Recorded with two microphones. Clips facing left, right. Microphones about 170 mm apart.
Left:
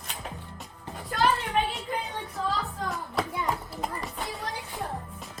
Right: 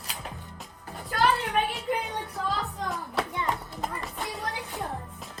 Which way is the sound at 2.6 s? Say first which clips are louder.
Even; centre (ahead or behind).